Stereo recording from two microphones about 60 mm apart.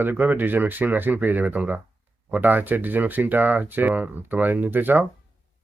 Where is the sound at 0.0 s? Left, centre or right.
Right.